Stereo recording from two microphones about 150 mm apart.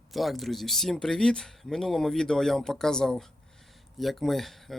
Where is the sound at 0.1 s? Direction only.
Centre (ahead or behind).